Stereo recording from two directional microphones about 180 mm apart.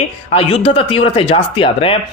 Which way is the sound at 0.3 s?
30° left (ahead or behind).